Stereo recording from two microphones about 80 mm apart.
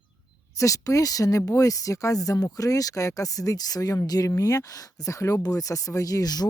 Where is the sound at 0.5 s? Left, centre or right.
Left.